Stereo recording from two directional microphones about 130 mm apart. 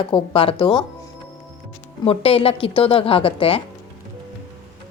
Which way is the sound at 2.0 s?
50° left (ahead or behind).